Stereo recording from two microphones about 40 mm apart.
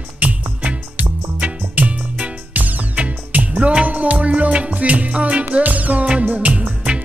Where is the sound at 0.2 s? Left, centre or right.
Right.